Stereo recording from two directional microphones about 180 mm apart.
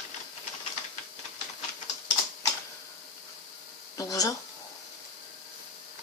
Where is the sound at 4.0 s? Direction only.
20° left (ahead or behind).